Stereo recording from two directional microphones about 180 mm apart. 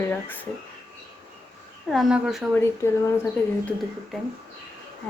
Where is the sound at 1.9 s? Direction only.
Centre (ahead or behind).